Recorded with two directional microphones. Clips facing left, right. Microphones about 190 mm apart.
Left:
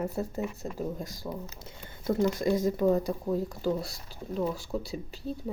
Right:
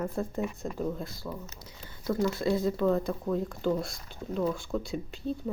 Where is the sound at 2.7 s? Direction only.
10° left (ahead or behind).